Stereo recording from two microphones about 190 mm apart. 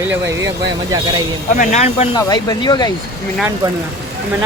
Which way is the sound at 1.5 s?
40° left (ahead or behind).